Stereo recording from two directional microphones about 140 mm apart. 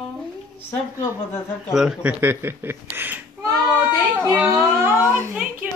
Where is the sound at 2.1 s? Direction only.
15° right (ahead or behind).